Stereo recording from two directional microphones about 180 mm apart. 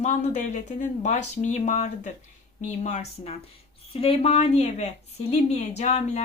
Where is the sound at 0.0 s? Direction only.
40° left (ahead or behind).